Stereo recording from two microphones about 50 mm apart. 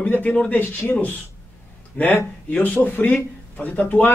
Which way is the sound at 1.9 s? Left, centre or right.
Left.